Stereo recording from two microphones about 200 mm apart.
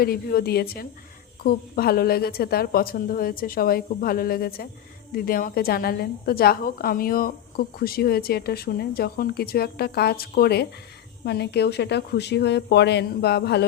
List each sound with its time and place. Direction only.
0.0 s a woman's voice: 50° left (ahead or behind)